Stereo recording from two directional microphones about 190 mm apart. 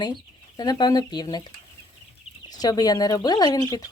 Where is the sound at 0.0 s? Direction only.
20° left (ahead or behind).